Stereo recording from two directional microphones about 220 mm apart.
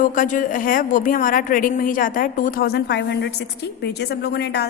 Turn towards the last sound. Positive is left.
turn(degrees=50)  # may be behind; listen again after turning